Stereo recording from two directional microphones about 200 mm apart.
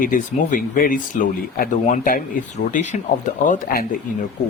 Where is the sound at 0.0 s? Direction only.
40° left (ahead or behind).